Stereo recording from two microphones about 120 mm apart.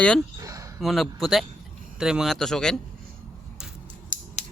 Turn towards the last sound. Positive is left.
turn(degrees=90)